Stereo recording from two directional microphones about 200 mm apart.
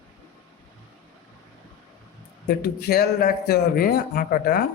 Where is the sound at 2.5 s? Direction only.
55° left (ahead or behind).